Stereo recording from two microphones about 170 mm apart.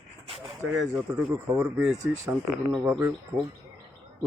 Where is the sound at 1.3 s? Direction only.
5° right (ahead or behind).